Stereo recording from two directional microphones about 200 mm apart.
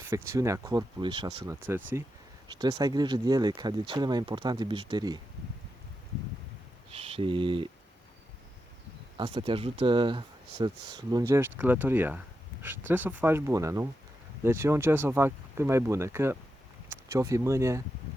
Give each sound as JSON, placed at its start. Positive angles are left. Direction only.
{"t": 0.0, "sound": "speech", "side_deg": -15}
{"t": 1.6, "sound": "speech", "side_deg": -10}
{"t": 6.9, "sound": "speech", "side_deg": -30}
{"t": 9.1, "sound": "speech", "side_deg": -25}